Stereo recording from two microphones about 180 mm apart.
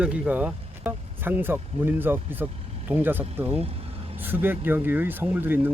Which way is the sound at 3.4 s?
35° right (ahead or behind).